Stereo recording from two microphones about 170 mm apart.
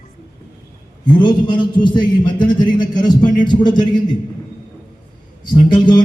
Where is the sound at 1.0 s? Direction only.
25° left (ahead or behind).